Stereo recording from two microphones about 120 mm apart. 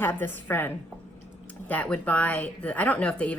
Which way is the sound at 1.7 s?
10° left (ahead or behind).